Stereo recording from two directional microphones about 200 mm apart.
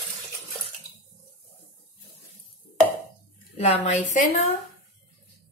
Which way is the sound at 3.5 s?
30° left (ahead or behind).